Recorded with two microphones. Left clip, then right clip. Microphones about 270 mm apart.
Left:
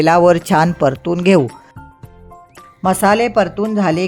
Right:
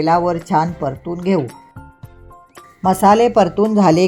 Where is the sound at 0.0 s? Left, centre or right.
Left.